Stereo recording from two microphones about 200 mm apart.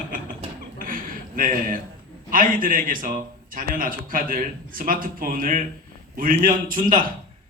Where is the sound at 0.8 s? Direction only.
45° right (ahead or behind).